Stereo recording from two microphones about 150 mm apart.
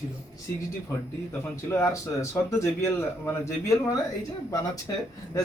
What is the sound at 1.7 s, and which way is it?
A man's voice, 20° left (ahead or behind).